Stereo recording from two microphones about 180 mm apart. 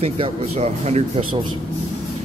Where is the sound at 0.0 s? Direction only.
35° right (ahead or behind).